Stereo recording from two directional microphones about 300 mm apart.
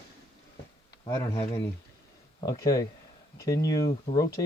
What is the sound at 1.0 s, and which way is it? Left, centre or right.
Speech, centre.